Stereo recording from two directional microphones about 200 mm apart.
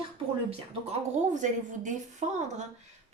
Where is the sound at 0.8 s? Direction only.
35° right (ahead or behind).